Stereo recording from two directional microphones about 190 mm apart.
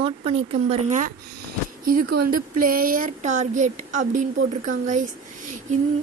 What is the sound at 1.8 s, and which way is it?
Speech, 50° right (ahead or behind).